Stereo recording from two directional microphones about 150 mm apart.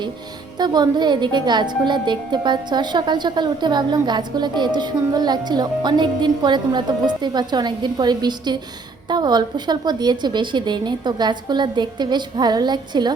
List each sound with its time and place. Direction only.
0.6 s a woman's voice: 30° right (ahead or behind)